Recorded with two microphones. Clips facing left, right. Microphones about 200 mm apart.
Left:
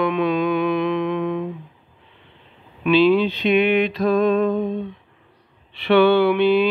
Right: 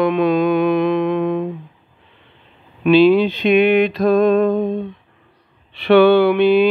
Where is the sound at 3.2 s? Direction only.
50° right (ahead or behind).